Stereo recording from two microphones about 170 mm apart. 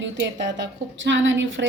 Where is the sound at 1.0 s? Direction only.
90° right.